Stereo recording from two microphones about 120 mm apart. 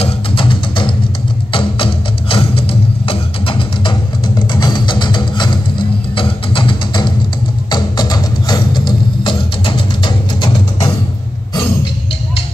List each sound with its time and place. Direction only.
0.0 s music: 45° left (ahead or behind)